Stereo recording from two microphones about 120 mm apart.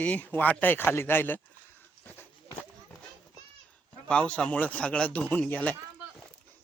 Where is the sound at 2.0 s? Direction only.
15° left (ahead or behind).